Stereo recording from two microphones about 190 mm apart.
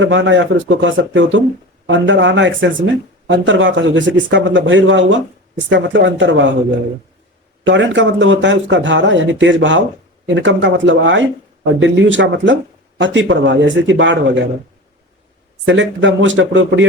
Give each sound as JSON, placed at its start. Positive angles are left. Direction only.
{"t": 0.0, "sound": "speech", "side_deg": -75}
{"t": 7.6, "sound": "speech", "side_deg": -75}
{"t": 15.6, "sound": "speech", "side_deg": -75}